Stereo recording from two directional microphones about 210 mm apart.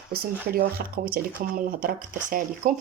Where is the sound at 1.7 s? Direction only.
40° right (ahead or behind).